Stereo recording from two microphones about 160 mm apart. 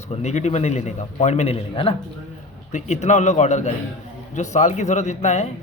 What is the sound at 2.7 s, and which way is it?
Speech, 45° left (ahead or behind).